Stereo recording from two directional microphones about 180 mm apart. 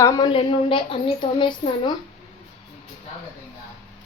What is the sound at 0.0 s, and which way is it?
Speech, 15° left (ahead or behind).